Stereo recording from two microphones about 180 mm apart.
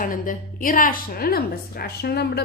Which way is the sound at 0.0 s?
50° left (ahead or behind).